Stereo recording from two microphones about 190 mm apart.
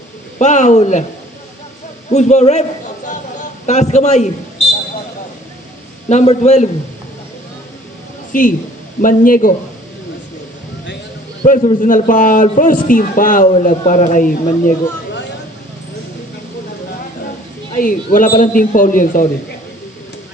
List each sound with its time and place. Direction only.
0.3 s a man's voice: 40° left (ahead or behind)
2.0 s a man's voice: 35° left (ahead or behind)
3.7 s a man's voice: 35° left (ahead or behind)
6.1 s a man's voice: 35° left (ahead or behind)
8.3 s a man's voice: 45° left (ahead or behind)
11.4 s a man's voice: 45° left (ahead or behind)
17.7 s a man's voice: 45° left (ahead or behind)